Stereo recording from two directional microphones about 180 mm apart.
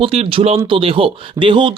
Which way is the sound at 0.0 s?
30° right (ahead or behind).